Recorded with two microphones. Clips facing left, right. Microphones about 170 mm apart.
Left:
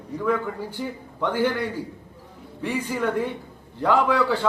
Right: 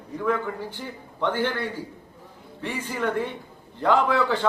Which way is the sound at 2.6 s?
10° left (ahead or behind).